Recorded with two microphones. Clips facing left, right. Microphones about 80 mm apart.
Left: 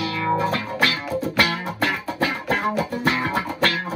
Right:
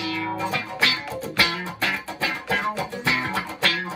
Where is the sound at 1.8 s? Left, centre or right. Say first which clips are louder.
Left 4 dB; left.